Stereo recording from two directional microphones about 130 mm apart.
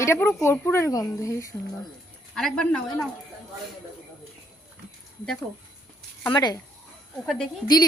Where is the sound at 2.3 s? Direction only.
5° left (ahead or behind).